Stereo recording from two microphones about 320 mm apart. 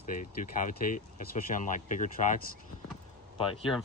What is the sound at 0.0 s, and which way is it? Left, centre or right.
Speech, left.